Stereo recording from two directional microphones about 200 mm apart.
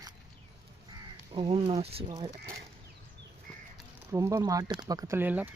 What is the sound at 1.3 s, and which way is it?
Speech, 25° right (ahead or behind).